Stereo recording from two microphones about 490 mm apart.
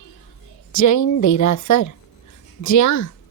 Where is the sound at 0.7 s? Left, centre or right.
Left.